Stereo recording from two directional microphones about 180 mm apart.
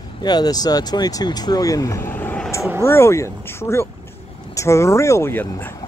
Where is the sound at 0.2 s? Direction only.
20° left (ahead or behind).